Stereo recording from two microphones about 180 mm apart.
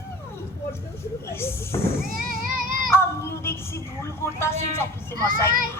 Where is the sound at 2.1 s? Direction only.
50° right (ahead or behind).